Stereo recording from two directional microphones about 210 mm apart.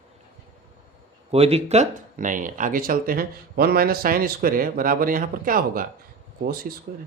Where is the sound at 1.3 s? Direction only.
30° right (ahead or behind).